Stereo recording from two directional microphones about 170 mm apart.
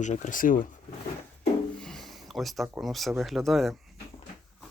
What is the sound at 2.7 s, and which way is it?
Speech, centre (ahead or behind).